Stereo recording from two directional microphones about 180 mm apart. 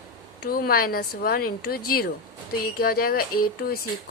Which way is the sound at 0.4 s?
55° left (ahead or behind).